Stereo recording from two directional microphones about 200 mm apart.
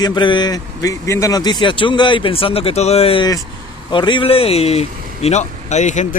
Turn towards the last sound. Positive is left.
turn(degrees=35)  # may be behind; listen again after turning